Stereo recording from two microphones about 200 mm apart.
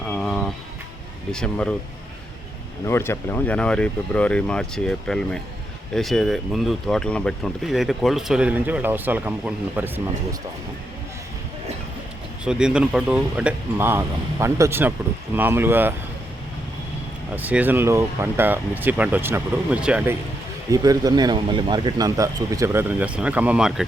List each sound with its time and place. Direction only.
0.1 s music: 5° left (ahead or behind)
1.3 s speech: 5° left (ahead or behind)
2.8 s speech: 10° left (ahead or behind); by 10.0 s 10° right (ahead or behind)
12.5 s speech: 5° right (ahead or behind)
17.3 s speech: 10° right (ahead or behind)
20.7 s speech: 20° right (ahead or behind)